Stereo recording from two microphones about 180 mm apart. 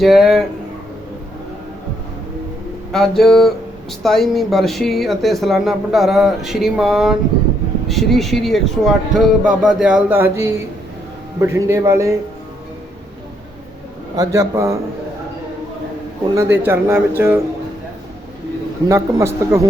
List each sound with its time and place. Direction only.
0.0 s speech: centre (ahead or behind)
2.9 s speech: centre (ahead or behind); by 12.1 s 15° right (ahead or behind)
14.2 s speech: 15° right (ahead or behind)
16.3 s speech: 15° right (ahead or behind)
18.9 s speech: 15° right (ahead or behind)